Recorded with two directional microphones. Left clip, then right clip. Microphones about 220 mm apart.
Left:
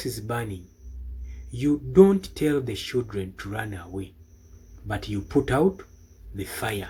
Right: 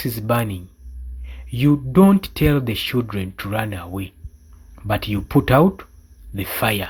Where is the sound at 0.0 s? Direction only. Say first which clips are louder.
Right 9 dB; 40° right (ahead or behind).